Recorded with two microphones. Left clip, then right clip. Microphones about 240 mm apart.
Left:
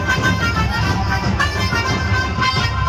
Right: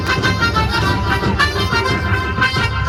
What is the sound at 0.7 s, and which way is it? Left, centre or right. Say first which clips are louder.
Music: right 3 dB; right.